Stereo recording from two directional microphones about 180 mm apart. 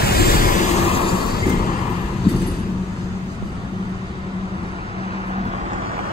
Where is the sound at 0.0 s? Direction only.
60° left (ahead or behind); by 1.1 s 35° left (ahead or behind).